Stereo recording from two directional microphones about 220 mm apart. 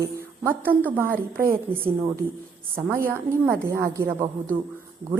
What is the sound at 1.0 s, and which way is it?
Speech, 40° right (ahead or behind).